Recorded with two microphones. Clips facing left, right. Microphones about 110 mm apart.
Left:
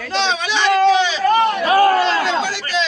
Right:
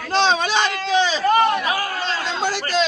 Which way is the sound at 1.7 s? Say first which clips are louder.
Left 11 dB; 55° left (ahead or behind).